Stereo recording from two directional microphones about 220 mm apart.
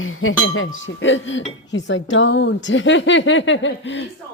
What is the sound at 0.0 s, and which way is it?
Speech, 65° left (ahead or behind).